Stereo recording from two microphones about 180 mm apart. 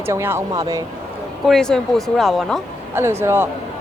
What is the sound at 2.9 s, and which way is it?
Speech, 15° right (ahead or behind).